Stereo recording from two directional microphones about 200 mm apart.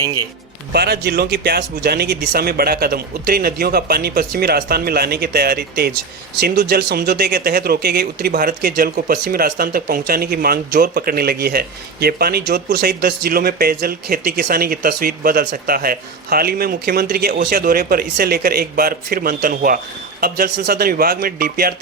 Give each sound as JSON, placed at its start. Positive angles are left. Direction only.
{"t": 0.7, "sound": "speech", "side_deg": -55}